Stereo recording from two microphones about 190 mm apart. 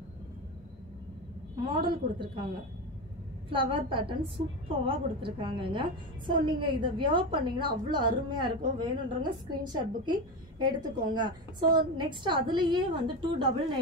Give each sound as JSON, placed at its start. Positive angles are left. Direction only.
{"t": 1.7, "sound": "a woman's voice", "side_deg": -25}
{"t": 3.4, "sound": "a woman's voice", "side_deg": -25}